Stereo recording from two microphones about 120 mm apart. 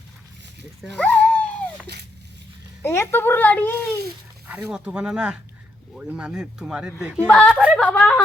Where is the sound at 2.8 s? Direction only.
20° left (ahead or behind).